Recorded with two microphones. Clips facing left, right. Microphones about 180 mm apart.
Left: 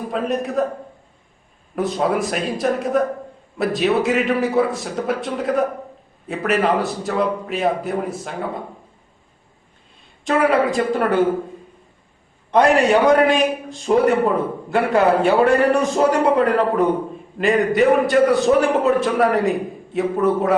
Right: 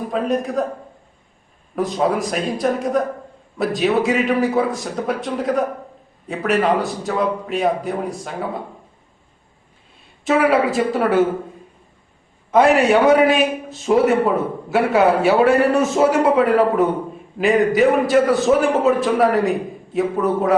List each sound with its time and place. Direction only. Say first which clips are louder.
0.1 s a man's voice: right 1 dB; centre (ahead or behind)
1.7 s a man's voice: right 1 dB; centre (ahead or behind)
10.2 s a man's voice: right 1 dB; 5° right (ahead or behind)
12.5 s a man's voice: right 1 dB; 5° right (ahead or behind)